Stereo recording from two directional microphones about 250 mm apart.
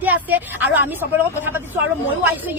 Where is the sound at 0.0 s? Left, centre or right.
Centre.